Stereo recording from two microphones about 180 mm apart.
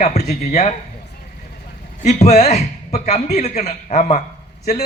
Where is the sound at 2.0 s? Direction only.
40° left (ahead or behind).